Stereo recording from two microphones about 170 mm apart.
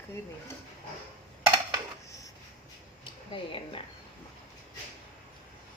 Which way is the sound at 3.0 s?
30° left (ahead or behind).